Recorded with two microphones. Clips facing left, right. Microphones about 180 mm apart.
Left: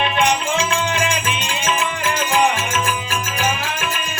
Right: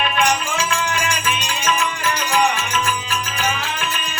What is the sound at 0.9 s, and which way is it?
Music, 55° left (ahead or behind).